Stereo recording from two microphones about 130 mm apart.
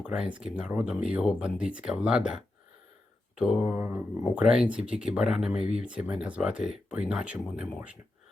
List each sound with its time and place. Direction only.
0.0 s speech: 5° right (ahead or behind)